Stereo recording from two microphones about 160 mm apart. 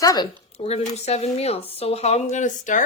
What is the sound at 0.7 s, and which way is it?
Speech, 40° left (ahead or behind).